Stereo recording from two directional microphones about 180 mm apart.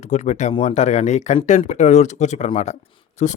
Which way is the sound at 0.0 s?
40° left (ahead or behind).